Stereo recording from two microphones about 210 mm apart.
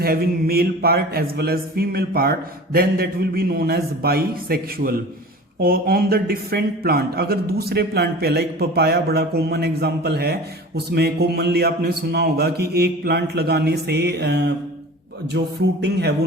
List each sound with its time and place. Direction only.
0.0 s a man's voice: 45° right (ahead or behind)